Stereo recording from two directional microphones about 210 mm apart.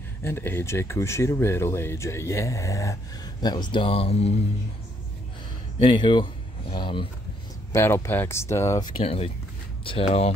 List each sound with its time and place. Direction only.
0.2 s speech: 10° left (ahead or behind); by 4.4 s 30° left (ahead or behind)
5.9 s speech: 20° left (ahead or behind)
7.7 s speech: 10° left (ahead or behind)
9.0 s speech: 30° left (ahead or behind)